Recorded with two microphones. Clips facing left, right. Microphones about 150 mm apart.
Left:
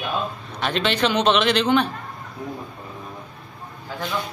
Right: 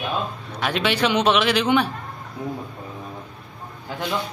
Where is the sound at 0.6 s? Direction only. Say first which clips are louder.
Even; 10° right (ahead or behind).